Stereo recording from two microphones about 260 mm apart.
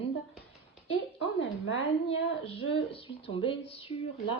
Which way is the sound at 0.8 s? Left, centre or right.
Left.